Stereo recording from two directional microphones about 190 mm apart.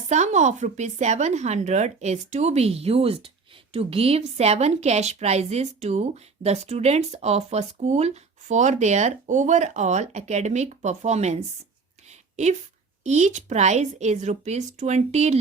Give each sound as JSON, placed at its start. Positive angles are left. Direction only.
{"t": 0.1, "sound": "speech", "side_deg": -40}
{"t": 12.0, "sound": "a sound", "side_deg": -35}
{"t": 13.1, "sound": "speech", "side_deg": -40}